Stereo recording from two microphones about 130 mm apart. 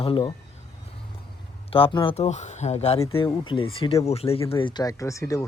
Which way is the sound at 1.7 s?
45° left (ahead or behind).